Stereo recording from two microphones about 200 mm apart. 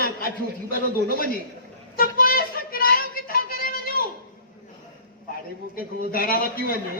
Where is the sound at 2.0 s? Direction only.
45° left (ahead or behind).